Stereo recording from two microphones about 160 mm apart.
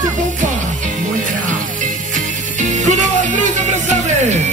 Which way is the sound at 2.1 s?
50° right (ahead or behind).